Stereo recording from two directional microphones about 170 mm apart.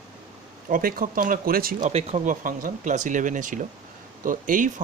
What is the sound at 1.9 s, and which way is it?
Speech, 40° right (ahead or behind).